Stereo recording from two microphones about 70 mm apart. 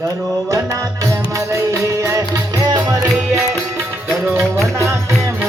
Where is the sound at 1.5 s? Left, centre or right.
Right.